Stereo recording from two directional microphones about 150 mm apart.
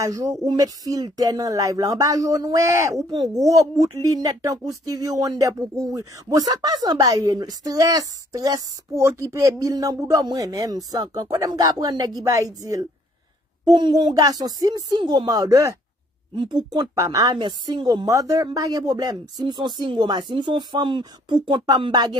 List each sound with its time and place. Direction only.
0.0 s speech: 20° right (ahead or behind)